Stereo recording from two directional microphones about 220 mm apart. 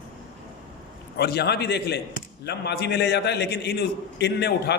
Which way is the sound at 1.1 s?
50° left (ahead or behind).